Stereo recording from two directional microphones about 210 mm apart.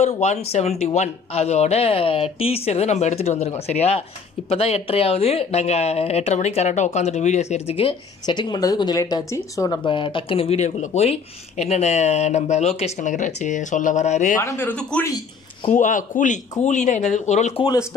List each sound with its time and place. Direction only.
0.0 s speech: 30° left (ahead or behind)
14.4 s speech: 10° left (ahead or behind)
15.7 s speech: 35° left (ahead or behind)